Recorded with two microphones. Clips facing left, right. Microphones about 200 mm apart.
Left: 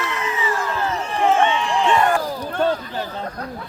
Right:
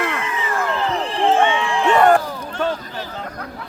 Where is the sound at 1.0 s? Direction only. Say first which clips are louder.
Right 1 dB; 35° right (ahead or behind).